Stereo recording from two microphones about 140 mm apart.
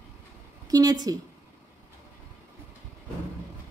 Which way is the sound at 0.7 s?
25° right (ahead or behind).